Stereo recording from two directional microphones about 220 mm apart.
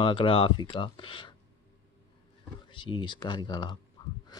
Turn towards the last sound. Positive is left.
turn(degrees=20)  # may be behind; listen again after turning